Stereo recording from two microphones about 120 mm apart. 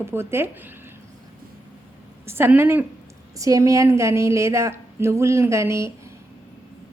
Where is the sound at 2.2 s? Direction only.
20° right (ahead or behind).